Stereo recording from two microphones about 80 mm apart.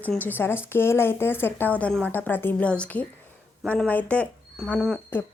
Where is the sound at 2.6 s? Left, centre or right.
Centre.